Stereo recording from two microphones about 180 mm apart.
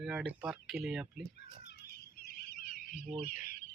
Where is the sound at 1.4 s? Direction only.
65° left (ahead or behind); by 3.1 s 50° left (ahead or behind).